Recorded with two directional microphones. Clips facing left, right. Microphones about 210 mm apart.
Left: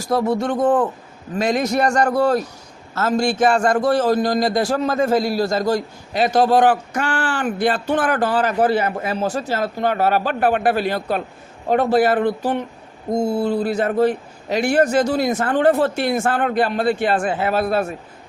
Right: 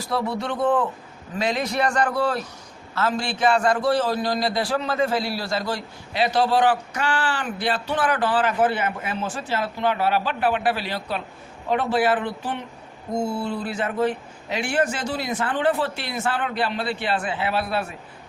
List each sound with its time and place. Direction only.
0.0 s a man's voice: 45° left (ahead or behind)